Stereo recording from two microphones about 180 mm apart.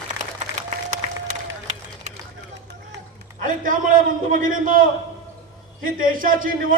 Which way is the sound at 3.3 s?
50° right (ahead or behind).